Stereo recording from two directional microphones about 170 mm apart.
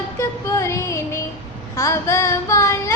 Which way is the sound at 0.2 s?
15° left (ahead or behind).